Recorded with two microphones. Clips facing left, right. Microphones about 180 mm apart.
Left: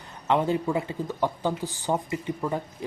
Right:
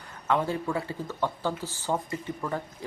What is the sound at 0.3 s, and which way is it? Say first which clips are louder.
Speech: left 3 dB; 20° left (ahead or behind).